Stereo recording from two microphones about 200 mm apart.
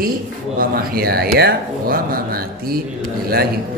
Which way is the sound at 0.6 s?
50° right (ahead or behind).